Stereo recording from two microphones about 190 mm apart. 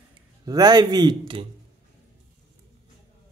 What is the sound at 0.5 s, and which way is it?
Speech, 20° right (ahead or behind).